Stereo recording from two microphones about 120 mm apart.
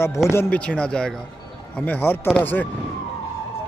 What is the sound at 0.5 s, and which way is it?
A man's voice, 10° left (ahead or behind).